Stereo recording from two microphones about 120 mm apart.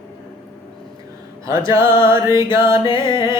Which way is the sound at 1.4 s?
25° right (ahead or behind).